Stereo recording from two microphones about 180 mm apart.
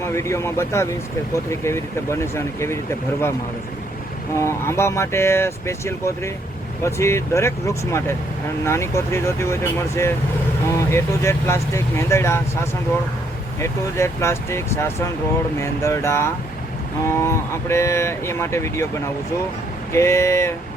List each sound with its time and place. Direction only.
0.1 s speech: 15° left (ahead or behind)
4.4 s speech: 15° left (ahead or behind)
19.9 s speech: 15° left (ahead or behind)